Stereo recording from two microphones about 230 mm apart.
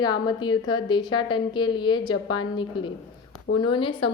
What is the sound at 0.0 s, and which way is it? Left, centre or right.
A woman's voice, centre.